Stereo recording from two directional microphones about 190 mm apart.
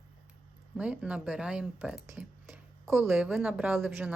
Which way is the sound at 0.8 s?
5° right (ahead or behind).